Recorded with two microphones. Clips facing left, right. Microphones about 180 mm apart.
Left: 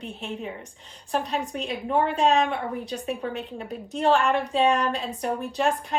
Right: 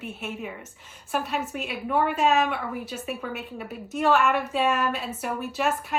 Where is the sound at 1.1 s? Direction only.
35° left (ahead or behind).